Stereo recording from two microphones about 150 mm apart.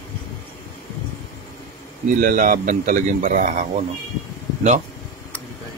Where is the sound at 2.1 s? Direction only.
60° right (ahead or behind).